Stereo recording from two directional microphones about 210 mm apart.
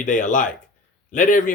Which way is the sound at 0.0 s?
35° left (ahead or behind).